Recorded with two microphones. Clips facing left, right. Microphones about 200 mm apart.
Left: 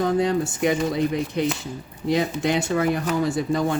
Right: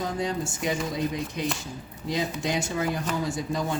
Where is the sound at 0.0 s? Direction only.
60° left (ahead or behind).